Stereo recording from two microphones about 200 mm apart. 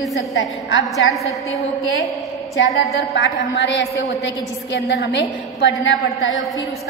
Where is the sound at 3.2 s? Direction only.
65° left (ahead or behind).